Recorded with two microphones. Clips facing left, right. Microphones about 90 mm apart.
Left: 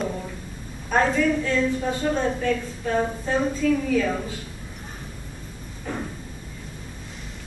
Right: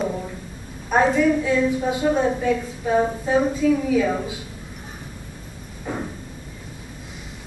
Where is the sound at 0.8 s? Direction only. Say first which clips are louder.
Right 3 dB; 10° right (ahead or behind).